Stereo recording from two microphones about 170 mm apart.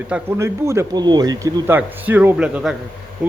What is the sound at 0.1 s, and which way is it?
A man's voice, 15° right (ahead or behind).